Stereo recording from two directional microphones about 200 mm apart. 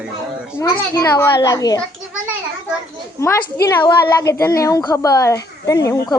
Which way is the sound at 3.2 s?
15° left (ahead or behind).